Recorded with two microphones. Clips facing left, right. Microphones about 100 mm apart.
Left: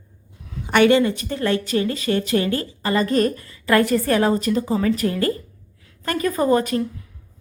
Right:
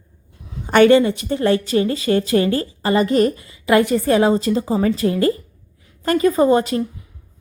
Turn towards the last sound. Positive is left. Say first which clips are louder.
# right 3 dB
turn(degrees=-25)  # may be behind; listen again after turning